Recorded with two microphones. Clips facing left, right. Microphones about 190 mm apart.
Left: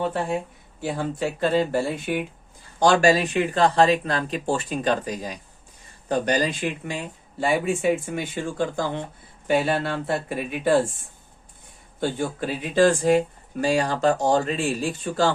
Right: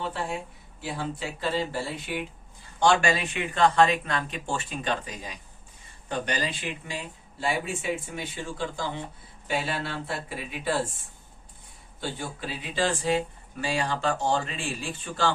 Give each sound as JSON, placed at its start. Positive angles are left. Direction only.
{"t": 0.8, "sound": "speech", "side_deg": 50}
{"t": 2.7, "sound": "speech", "side_deg": 40}
{"t": 11.9, "sound": "speech", "side_deg": 50}